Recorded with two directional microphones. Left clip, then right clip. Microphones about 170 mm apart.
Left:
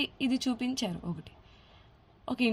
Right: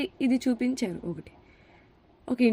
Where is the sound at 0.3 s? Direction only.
20° right (ahead or behind).